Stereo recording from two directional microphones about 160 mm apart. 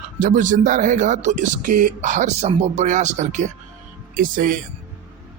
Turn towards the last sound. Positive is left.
turn(degrees=-60)  # may be behind; listen again after turning